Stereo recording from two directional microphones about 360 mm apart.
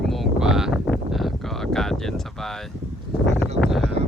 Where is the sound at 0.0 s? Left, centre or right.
Centre.